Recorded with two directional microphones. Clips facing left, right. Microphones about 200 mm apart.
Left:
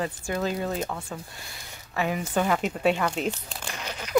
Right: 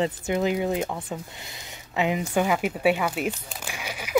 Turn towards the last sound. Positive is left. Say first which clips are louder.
# right 1 dB
turn(degrees=-10)  # may be behind; listen again after turning